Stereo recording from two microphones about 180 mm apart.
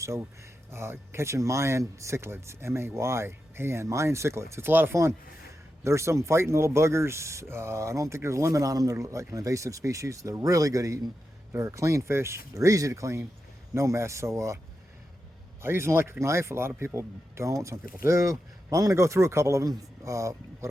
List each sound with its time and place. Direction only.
0.7 s speech: 15° right (ahead or behind)
15.6 s speech: 15° right (ahead or behind)